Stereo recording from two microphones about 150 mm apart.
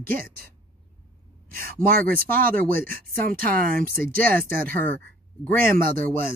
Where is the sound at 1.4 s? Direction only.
70° right (ahead or behind).